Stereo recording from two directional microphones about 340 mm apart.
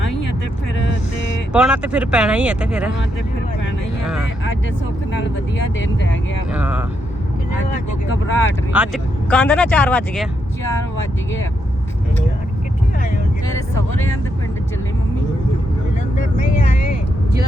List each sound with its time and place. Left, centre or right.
0.8 s a sound: left
1.5 s speech: centre
5.8 s speech: left
6.5 s speech: centre
8.0 s speech: left
8.7 s speech: centre